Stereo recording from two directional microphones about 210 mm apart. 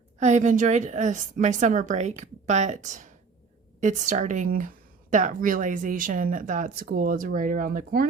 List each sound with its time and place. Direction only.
0.2 s a woman's voice: 35° right (ahead or behind)